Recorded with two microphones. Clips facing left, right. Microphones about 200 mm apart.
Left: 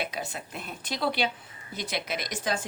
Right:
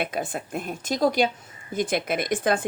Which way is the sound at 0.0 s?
50° right (ahead or behind).